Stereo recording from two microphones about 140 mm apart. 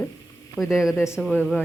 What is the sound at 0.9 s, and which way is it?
Speech, 20° left (ahead or behind).